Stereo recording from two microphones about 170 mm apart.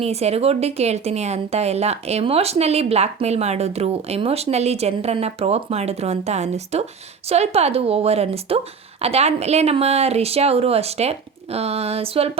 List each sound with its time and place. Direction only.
0.0 s speech: 40° right (ahead or behind)